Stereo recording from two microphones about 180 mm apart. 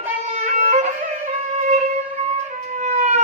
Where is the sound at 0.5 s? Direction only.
40° right (ahead or behind).